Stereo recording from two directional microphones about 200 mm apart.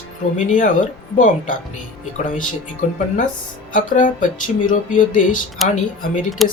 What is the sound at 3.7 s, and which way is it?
Speech, 40° left (ahead or behind).